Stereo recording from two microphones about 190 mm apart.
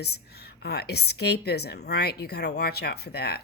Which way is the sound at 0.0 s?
60° left (ahead or behind).